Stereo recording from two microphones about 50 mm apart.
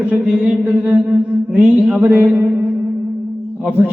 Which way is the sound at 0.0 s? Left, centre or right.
Right.